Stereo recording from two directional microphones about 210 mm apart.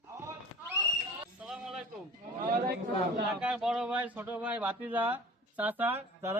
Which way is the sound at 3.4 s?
5° right (ahead or behind).